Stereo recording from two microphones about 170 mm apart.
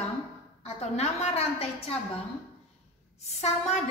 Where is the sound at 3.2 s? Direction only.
40° left (ahead or behind).